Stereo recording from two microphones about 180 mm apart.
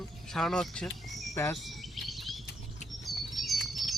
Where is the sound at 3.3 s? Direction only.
Centre (ahead or behind).